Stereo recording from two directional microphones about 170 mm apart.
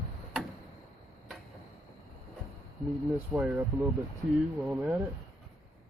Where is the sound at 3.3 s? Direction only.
10° right (ahead or behind).